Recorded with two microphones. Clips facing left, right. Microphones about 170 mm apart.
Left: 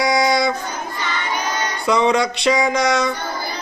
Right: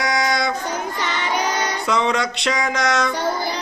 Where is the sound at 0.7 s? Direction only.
80° right.